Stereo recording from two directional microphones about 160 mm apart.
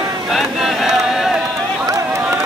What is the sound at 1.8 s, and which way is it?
Run, 20° right (ahead or behind).